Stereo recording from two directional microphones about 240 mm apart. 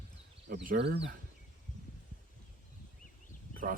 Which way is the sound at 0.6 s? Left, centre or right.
Right.